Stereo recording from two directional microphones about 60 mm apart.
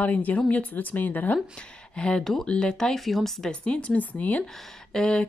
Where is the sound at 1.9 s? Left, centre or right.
Centre.